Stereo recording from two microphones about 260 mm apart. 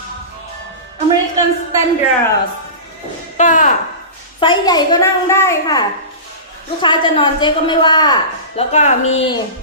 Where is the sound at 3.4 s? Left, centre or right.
Left.